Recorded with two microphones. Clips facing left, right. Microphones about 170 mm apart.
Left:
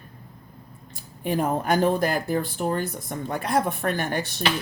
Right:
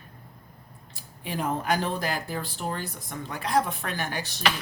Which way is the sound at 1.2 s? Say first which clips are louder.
Left 5 dB; 45° left (ahead or behind).